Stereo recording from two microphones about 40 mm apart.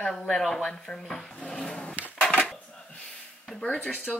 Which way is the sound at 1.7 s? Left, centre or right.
Left.